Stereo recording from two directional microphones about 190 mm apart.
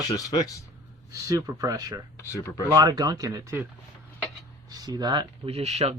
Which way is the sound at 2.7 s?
20° right (ahead or behind).